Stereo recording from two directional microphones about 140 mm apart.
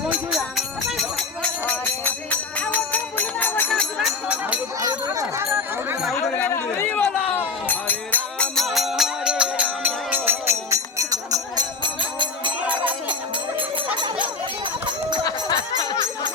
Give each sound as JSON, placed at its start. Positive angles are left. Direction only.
{"t": 0.3, "sound": "music", "side_deg": 0}
{"t": 1.6, "sound": "music", "side_deg": 15}
{"t": 3.7, "sound": "a sound", "side_deg": 0}
{"t": 4.8, "sound": "jingle bell", "side_deg": -25}
{"t": 6.3, "sound": "run", "side_deg": 15}
{"t": 15.2, "sound": "a sound", "side_deg": 30}